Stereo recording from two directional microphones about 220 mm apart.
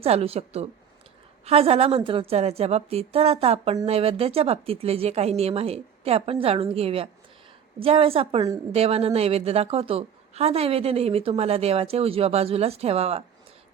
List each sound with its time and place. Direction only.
0.0 s a woman's voice: 25° right (ahead or behind)